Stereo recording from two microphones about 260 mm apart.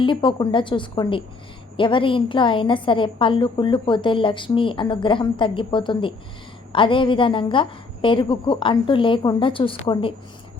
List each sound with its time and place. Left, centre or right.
0.0 s a woman's voice: centre